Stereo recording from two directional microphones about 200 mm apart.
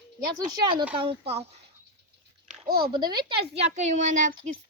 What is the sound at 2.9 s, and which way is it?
Speech, 20° right (ahead or behind).